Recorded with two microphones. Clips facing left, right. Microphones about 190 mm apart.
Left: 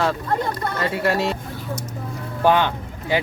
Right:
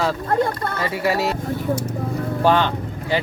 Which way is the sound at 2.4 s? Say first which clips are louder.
Left 1 dB; 10° left (ahead or behind).